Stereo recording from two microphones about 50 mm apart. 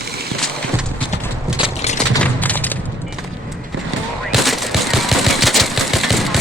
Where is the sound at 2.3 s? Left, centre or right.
Left.